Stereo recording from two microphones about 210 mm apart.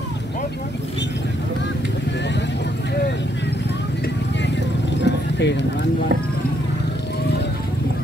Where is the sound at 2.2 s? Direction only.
55° left (ahead or behind).